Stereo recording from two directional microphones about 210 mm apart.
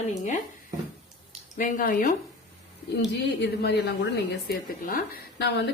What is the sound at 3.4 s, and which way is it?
A woman's voice, 50° left (ahead or behind).